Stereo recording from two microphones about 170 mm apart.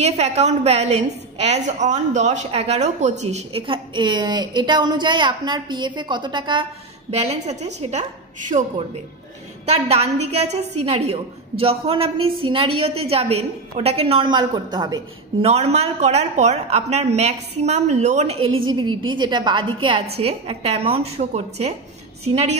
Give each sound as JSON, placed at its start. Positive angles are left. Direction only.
{"t": 0.0, "sound": "a woman's voice", "side_deg": -40}
{"t": 9.7, "sound": "a woman's voice", "side_deg": -35}
{"t": 15.4, "sound": "a woman's voice", "side_deg": -40}